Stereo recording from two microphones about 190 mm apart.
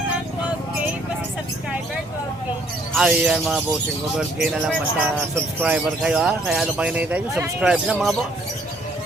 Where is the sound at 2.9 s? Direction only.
5° right (ahead or behind).